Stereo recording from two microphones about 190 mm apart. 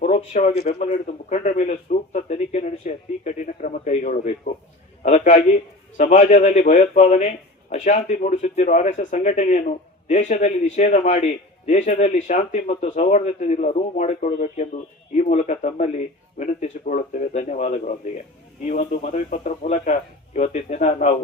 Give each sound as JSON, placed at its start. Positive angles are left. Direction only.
{"t": 0.0, "sound": "a man's voice", "side_deg": 35}